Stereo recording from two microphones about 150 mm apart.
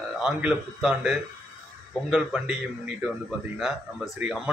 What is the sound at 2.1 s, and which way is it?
A man's voice, 10° right (ahead or behind).